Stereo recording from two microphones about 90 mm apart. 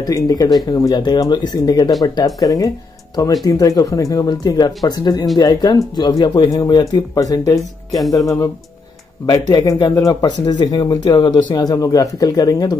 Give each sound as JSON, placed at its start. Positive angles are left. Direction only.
{"t": 0.0, "sound": "speech", "side_deg": 40}
{"t": 6.5, "sound": "speech", "side_deg": 40}
{"t": 9.2, "sound": "speech", "side_deg": 50}